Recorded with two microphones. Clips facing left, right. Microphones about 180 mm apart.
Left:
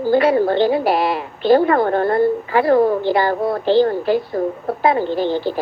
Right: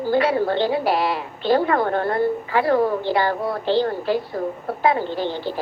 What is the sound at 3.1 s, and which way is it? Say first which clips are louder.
Speech: left 4 dB; 45° left (ahead or behind).